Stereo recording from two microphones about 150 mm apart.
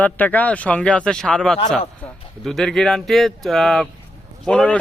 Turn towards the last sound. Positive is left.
turn(degrees=5)  # may be behind; listen again after turning